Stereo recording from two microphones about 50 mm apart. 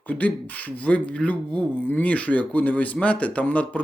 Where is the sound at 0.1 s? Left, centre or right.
Left.